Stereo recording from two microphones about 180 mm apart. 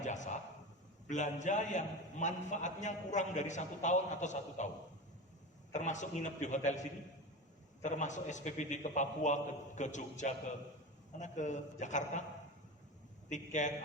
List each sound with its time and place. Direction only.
0.0 s a sound: 40° left (ahead or behind)
1.0 s a man's voice: 40° left (ahead or behind)
5.7 s a man's voice: 40° left (ahead or behind)
7.8 s a man's voice: 40° left (ahead or behind)
13.3 s a man's voice: 40° left (ahead or behind)